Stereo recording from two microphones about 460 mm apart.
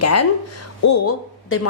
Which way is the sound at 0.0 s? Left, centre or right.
Left.